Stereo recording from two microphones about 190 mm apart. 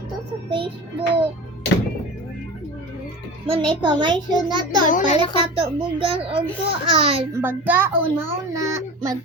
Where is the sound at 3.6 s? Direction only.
25° right (ahead or behind).